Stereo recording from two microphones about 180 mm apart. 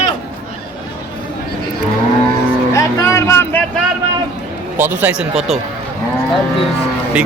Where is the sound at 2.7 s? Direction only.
15° left (ahead or behind).